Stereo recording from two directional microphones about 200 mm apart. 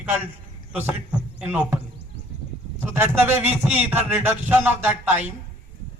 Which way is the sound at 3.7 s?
5° right (ahead or behind).